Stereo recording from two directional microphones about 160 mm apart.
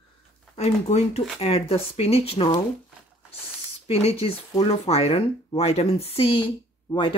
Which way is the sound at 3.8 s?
40° left (ahead or behind).